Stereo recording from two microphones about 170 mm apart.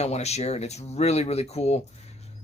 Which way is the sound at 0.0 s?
40° left (ahead or behind).